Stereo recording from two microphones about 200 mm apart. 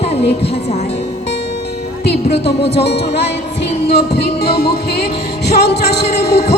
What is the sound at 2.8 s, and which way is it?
Heart murmur, 55° left (ahead or behind).